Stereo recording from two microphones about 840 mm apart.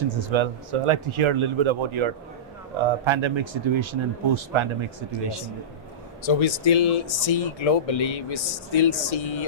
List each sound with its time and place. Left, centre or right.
0.1 s speech: right
6.2 s speech: left